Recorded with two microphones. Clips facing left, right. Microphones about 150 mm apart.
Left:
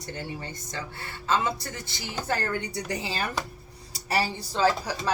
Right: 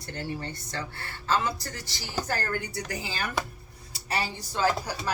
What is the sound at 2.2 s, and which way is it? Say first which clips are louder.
Speech: left 5 dB; 25° left (ahead or behind).